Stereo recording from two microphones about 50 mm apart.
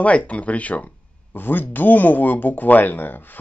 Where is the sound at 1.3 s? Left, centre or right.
Left.